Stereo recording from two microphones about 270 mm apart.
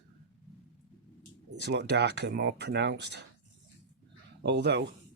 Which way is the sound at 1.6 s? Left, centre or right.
Right.